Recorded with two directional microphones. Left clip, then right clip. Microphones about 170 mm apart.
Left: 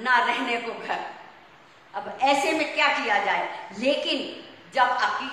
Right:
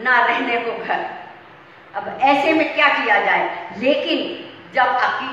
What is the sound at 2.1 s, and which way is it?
A woman's voice, 25° left (ahead or behind).